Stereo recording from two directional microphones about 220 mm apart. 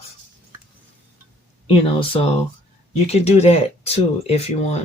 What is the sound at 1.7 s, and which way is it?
Speech, 25° left (ahead or behind).